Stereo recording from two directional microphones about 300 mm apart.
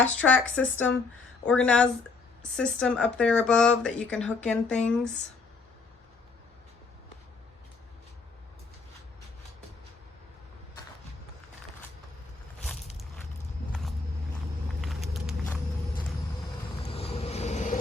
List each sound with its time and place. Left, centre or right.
0.0 s speech: centre
14.8 s vehicle: centre
16.9 s vehicle: centre